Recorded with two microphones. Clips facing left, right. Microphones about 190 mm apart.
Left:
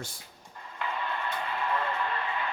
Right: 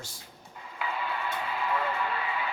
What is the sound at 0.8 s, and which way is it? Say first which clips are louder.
Radio: even; 5° right (ahead or behind).